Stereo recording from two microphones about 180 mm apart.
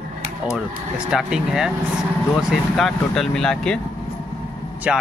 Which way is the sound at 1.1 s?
5° right (ahead or behind).